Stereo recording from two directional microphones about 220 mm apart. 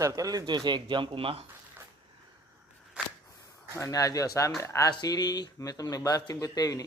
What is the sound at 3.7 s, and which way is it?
Speech, 15° left (ahead or behind).